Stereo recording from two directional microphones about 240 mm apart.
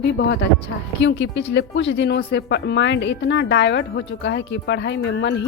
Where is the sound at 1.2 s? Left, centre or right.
Left.